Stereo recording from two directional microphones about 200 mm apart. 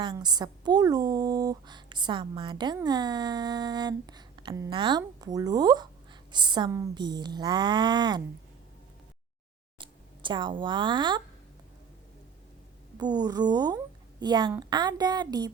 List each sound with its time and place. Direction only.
0.0 s a woman's voice: 20° right (ahead or behind)
9.7 s speech: 25° right (ahead or behind)
13.0 s speech: 20° right (ahead or behind)